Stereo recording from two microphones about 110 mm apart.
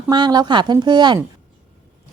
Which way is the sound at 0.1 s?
40° right (ahead or behind).